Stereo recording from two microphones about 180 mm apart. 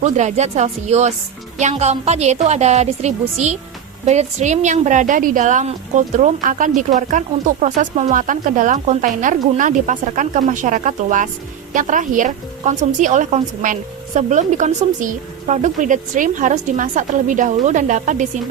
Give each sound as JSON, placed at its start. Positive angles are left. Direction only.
{"t": 0.0, "sound": "a woman's voice", "side_deg": -40}